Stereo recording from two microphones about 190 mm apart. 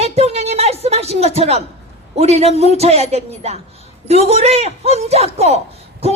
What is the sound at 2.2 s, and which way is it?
Speech, 35° right (ahead or behind).